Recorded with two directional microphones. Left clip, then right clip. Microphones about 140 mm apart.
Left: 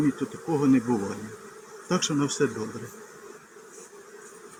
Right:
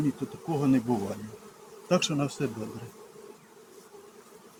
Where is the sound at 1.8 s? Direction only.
20° right (ahead or behind).